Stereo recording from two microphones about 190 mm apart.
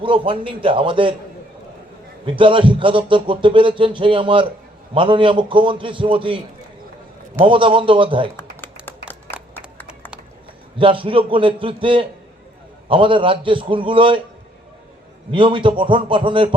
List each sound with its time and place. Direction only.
0.0 s speech: 25° right (ahead or behind)
2.2 s speech: 25° right (ahead or behind)
7.4 s speech: 25° right (ahead or behind)
8.6 s music: 10° left (ahead or behind)
10.8 s speech: 25° right (ahead or behind)
15.3 s speech: 25° right (ahead or behind)